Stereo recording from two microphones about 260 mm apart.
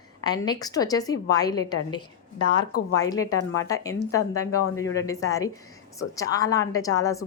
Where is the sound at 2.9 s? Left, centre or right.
Centre.